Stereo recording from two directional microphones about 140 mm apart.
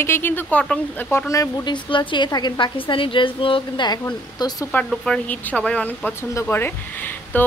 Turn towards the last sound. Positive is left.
turn(degrees=15)  # may be behind; listen again after turning